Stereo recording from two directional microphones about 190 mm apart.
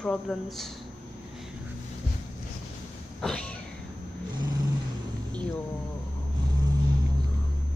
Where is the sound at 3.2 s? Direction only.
5° left (ahead or behind).